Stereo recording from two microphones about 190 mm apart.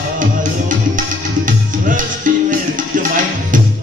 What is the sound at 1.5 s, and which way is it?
Music, 45° right (ahead or behind).